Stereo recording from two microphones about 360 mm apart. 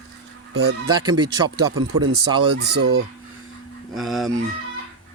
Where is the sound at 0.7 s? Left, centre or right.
Right.